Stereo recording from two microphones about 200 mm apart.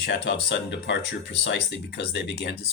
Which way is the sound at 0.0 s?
60° left (ahead or behind).